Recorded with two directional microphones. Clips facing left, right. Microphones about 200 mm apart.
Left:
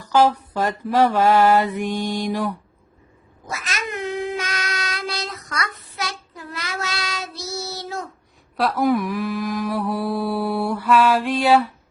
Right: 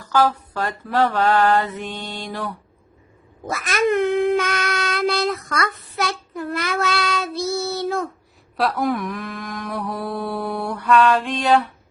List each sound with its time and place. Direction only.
0.0 s mantra: 20° left (ahead or behind)
3.4 s child singing: 55° right (ahead or behind)
8.5 s mantra: centre (ahead or behind)